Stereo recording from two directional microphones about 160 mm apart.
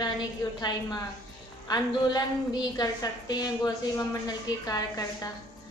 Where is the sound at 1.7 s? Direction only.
25° left (ahead or behind).